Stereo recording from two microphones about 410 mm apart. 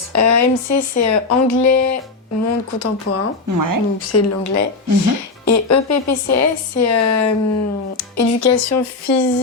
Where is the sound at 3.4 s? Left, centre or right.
Right.